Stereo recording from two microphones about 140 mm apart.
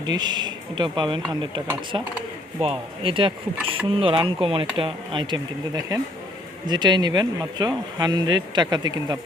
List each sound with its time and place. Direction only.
0.1 s speech: 30° right (ahead or behind)